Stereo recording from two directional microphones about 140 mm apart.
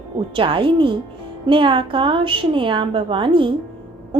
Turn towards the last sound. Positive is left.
turn(degrees=-40)  # may be behind; listen again after turning